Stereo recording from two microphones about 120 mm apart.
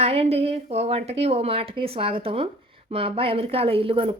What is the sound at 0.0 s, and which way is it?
Speech, 55° right (ahead or behind).